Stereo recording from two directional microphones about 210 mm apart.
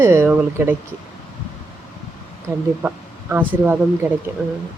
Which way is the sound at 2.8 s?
10° right (ahead or behind).